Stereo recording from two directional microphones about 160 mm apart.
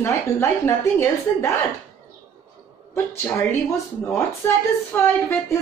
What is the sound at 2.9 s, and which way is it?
Speech, 15° left (ahead or behind).